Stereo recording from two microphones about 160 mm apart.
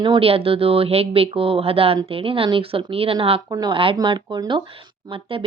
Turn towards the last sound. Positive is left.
turn(degrees=-35)  # may be behind; listen again after turning